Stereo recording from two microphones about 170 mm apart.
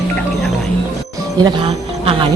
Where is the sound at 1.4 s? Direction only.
35° right (ahead or behind).